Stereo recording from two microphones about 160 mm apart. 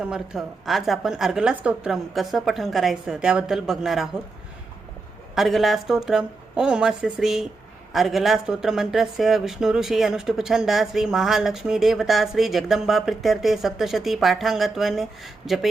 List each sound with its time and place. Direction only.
0.0 s speech: 5° right (ahead or behind)
5.3 s speech: centre (ahead or behind)